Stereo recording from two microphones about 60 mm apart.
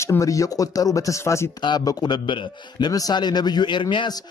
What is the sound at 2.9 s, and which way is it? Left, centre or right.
Speech, left.